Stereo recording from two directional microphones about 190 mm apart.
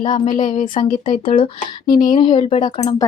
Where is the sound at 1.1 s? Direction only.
30° left (ahead or behind).